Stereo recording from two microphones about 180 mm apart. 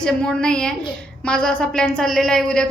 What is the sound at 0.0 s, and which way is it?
A woman's voice, 5° left (ahead or behind).